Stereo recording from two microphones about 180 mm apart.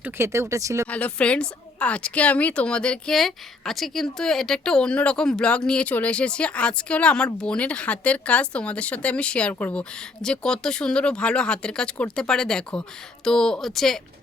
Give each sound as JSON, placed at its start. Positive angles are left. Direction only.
{"t": 0.0, "sound": "speech", "side_deg": -15}
{"t": 0.9, "sound": "a woman's voice", "side_deg": 5}